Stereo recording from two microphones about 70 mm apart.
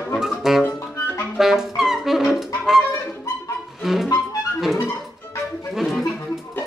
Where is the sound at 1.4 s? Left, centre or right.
Centre.